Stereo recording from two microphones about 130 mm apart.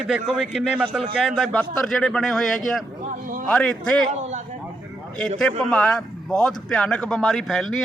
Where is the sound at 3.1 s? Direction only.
90° right.